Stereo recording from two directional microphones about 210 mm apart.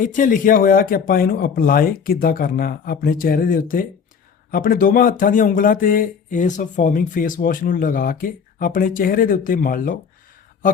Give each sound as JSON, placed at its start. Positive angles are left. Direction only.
{"t": 0.0, "sound": "speech", "side_deg": 40}